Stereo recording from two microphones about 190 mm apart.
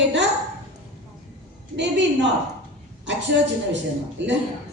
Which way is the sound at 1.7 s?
70° right (ahead or behind).